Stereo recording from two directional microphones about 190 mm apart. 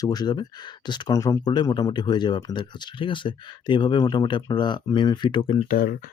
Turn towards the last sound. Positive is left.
turn(degrees=50)  # may be behind; listen again after turning